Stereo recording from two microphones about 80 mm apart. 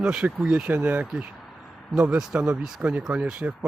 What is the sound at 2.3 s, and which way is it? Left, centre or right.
Speech, centre.